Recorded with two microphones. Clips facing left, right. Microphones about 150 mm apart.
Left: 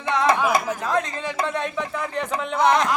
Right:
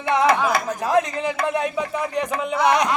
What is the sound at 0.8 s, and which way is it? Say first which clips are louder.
A man's voice: right 4 dB; 15° right (ahead or behind).